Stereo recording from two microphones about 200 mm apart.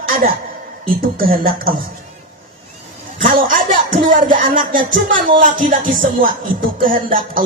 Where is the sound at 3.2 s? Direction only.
45° right (ahead or behind).